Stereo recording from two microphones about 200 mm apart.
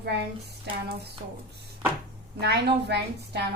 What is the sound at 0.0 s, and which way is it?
A woman's voice, 55° right (ahead or behind).